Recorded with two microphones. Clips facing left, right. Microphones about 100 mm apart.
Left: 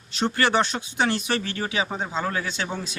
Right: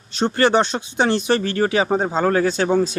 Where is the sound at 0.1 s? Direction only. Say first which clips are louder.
Right 6 dB; 30° right (ahead or behind).